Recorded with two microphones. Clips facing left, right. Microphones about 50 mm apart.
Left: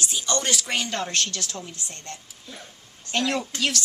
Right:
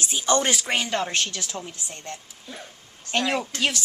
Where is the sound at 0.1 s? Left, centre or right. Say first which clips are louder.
Right 6 dB; right.